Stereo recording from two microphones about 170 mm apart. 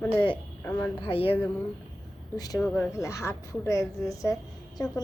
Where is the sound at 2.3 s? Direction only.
20° left (ahead or behind).